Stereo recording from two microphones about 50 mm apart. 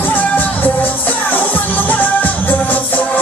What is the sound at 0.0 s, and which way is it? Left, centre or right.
Music, left.